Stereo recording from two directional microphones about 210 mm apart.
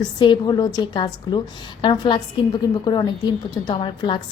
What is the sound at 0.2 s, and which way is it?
A woman's voice, 20° left (ahead or behind).